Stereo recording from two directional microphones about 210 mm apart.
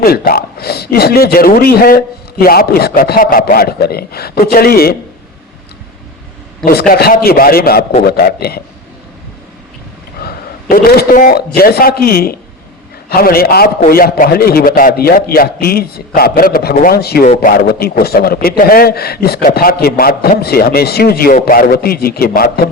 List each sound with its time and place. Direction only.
0.0 s a man's voice: 45° left (ahead or behind)
6.7 s a man's voice: 45° left (ahead or behind)
10.2 s a sound: 45° left (ahead or behind)
11.5 s a man's voice: 45° left (ahead or behind)